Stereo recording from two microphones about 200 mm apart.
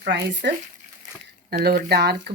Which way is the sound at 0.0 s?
60° right (ahead or behind).